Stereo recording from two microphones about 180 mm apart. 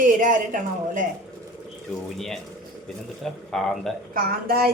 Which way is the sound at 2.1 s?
Centre (ahead or behind).